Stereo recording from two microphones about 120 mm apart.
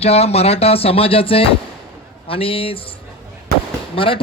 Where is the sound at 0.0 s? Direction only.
60° left (ahead or behind).